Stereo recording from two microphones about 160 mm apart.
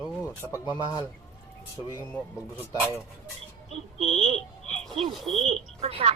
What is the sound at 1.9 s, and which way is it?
Speech, 20° left (ahead or behind).